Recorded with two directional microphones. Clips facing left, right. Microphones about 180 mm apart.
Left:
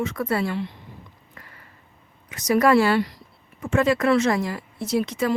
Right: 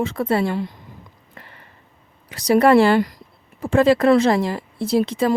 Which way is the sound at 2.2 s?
30° right (ahead or behind).